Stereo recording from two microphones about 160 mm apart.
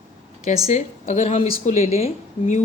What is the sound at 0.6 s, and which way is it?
Speech, 45° left (ahead or behind).